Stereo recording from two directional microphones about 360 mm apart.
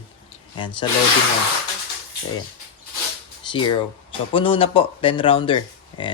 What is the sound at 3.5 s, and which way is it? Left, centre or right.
Speech, centre.